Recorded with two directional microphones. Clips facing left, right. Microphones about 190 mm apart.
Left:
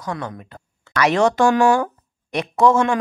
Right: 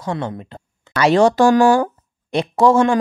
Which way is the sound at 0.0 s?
25° right (ahead or behind).